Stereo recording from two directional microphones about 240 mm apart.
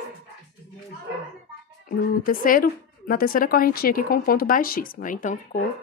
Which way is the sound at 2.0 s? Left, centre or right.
Left.